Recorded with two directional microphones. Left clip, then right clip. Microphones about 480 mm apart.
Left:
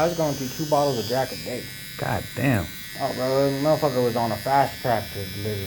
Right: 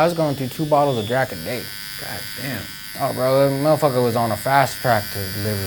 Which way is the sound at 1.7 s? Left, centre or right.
Centre.